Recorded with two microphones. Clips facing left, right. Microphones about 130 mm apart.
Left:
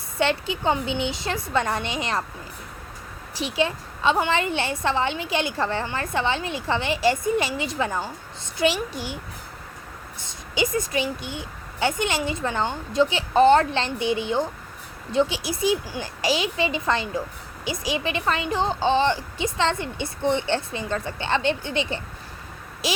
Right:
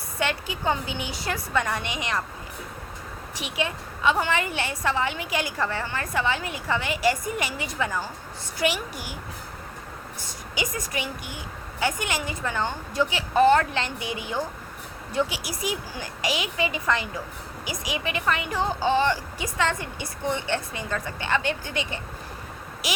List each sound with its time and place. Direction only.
0.2 s a woman's voice: 25° left (ahead or behind)
3.3 s a woman's voice: 30° left (ahead or behind)
10.2 s a woman's voice: 25° left (ahead or behind)